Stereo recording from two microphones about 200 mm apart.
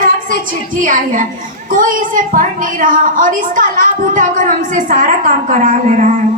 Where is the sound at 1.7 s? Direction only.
40° right (ahead or behind).